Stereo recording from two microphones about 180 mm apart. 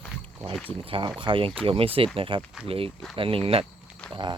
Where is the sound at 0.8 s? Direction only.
30° right (ahead or behind).